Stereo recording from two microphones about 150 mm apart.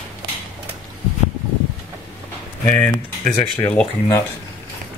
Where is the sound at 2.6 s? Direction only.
10° left (ahead or behind).